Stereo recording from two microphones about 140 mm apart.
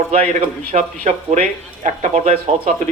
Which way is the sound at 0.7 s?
60° right (ahead or behind).